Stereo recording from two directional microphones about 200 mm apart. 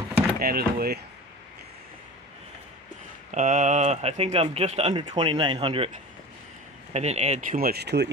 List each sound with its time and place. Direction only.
0.4 s speech: 50° right (ahead or behind)
3.3 s speech: 40° right (ahead or behind)
6.9 s speech: 35° right (ahead or behind); by 8.1 s 55° right (ahead or behind)